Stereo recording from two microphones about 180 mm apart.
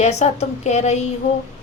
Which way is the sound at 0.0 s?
40° left (ahead or behind).